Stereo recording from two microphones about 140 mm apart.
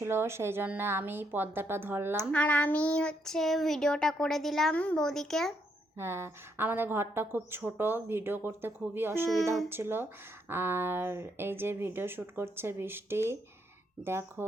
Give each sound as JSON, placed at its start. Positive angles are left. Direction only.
{"t": 0.0, "sound": "a woman's voice", "side_deg": -20}
{"t": 2.3, "sound": "child singing", "side_deg": 10}
{"t": 6.0, "sound": "a woman's voice", "side_deg": -20}